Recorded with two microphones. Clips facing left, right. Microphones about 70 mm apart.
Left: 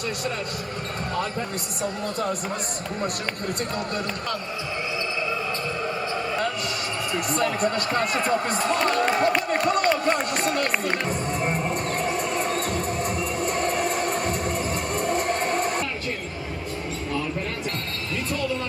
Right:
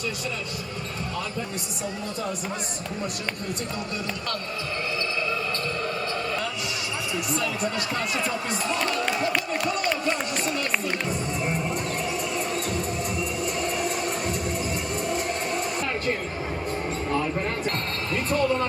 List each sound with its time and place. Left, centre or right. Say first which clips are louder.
7.1 s speech: left 4 dB; left
10.1 s music: left 3 dB; left
18.1 s basketball bounce: right 4 dB; right